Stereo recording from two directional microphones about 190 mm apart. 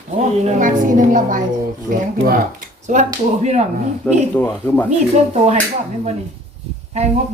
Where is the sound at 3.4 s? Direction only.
35° right (ahead or behind).